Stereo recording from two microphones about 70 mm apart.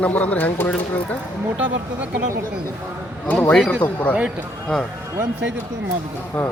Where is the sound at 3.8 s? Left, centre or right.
Left.